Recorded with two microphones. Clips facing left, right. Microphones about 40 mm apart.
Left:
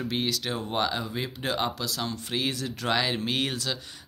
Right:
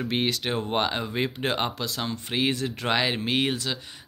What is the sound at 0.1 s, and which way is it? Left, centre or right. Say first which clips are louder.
Speech: right 5 dB; right.